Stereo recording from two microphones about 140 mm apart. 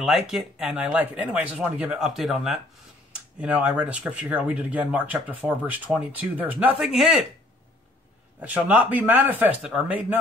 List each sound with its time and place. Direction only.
0.0 s speech: 5° right (ahead or behind)
8.4 s speech: 10° right (ahead or behind)